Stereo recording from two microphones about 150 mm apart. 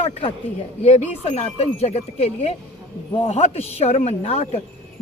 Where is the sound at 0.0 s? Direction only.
40° left (ahead or behind).